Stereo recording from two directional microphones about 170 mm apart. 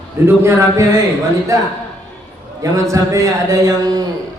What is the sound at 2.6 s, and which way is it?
A man's voice, 20° right (ahead or behind).